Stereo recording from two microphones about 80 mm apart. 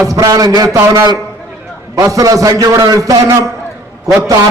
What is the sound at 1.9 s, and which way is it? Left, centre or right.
A man's voice, right.